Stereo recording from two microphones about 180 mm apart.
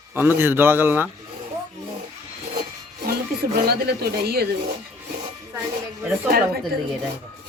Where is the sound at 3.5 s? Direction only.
60° right (ahead or behind).